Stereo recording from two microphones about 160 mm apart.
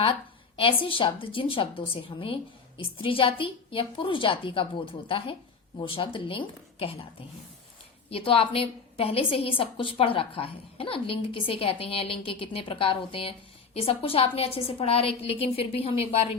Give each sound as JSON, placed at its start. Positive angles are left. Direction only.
{"t": 0.0, "sound": "a woman's voice", "side_deg": 35}